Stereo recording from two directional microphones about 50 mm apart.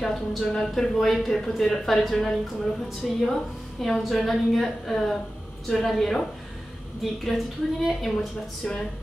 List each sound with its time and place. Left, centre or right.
0.0 s a woman's voice: centre
7.2 s a woman's voice: centre
8.6 s speech: centre